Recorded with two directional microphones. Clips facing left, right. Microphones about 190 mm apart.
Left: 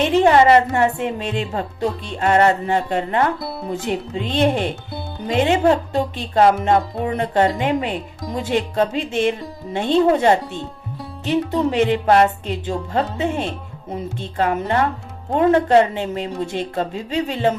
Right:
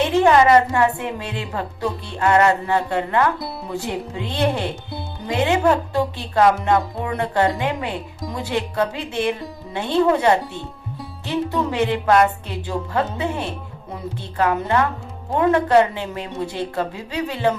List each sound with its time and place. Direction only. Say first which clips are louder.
0.0 s a woman's voice: left 1 dB; 20° left (ahead or behind)
11.7 s a woman's voice: left 2 dB; 20° left (ahead or behind)